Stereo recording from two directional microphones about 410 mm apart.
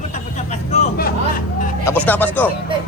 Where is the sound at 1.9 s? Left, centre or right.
Centre.